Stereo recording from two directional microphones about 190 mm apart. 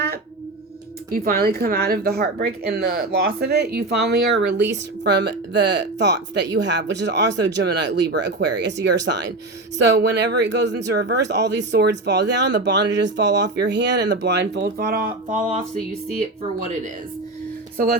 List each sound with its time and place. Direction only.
1.1 s speech: 50° right (ahead or behind)
15.4 s music: 40° right (ahead or behind)